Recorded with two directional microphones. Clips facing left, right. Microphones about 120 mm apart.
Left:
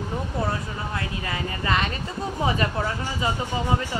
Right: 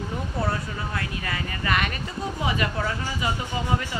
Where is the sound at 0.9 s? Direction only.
25° left (ahead or behind).